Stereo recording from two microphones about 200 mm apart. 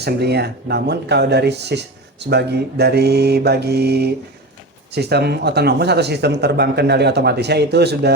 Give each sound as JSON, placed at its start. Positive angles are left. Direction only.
{"t": 0.0, "sound": "speech", "side_deg": -55}
{"t": 2.2, "sound": "mantra", "side_deg": -55}
{"t": 4.9, "sound": "speech", "side_deg": -55}